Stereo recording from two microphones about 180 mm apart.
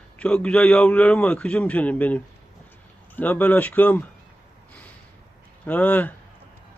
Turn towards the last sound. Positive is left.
turn(degrees=10)  # may be behind; listen again after turning